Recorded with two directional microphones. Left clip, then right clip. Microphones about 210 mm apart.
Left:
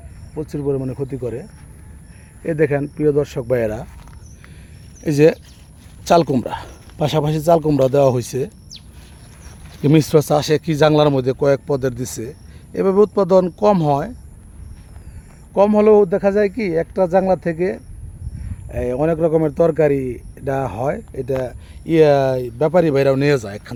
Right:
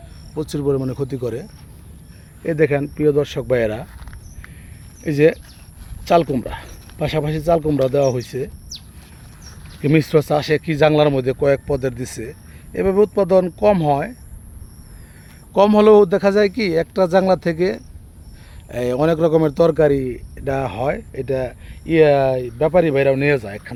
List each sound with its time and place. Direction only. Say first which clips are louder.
0.5 s speech: right 1 dB; 15° right (ahead or behind)
2.4 s a man's voice: right 1 dB; 5° left (ahead or behind)
5.0 s speech: left 2 dB; 25° left (ahead or behind)
9.8 s speech: left 2 dB; 25° left (ahead or behind)
15.5 s a man's voice: right 1 dB; centre (ahead or behind)
21.3 s speech: even; 20° left (ahead or behind)